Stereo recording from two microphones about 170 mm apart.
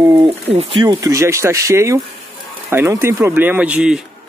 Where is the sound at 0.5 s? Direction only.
35° right (ahead or behind).